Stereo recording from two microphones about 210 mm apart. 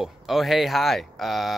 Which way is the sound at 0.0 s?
Centre (ahead or behind).